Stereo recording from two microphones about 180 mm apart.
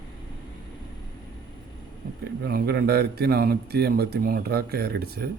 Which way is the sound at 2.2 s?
65° right (ahead or behind).